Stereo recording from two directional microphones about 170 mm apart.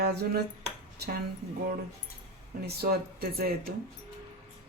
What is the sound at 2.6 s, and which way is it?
Speech, 65° right (ahead or behind).